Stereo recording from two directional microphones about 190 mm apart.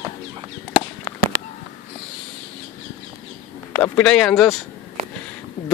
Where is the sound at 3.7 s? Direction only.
10° left (ahead or behind).